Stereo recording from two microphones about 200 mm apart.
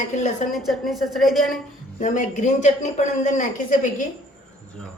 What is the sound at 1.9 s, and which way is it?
Speech, 40° left (ahead or behind).